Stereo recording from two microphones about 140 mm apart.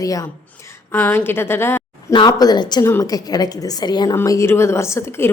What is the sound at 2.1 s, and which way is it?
A woman's voice, 30° left (ahead or behind).